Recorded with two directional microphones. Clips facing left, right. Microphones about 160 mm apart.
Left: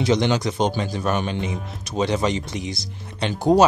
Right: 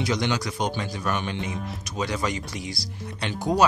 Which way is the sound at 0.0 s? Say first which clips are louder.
Left 6 dB; 25° left (ahead or behind).